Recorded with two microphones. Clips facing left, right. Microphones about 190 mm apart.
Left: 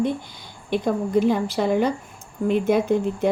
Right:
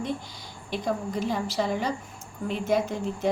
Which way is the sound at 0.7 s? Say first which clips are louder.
Left 8 dB; 55° left (ahead or behind).